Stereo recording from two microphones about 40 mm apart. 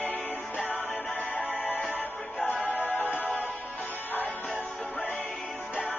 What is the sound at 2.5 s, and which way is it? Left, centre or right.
Music, left.